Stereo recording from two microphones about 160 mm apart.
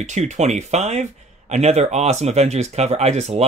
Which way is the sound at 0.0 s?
45° right (ahead or behind).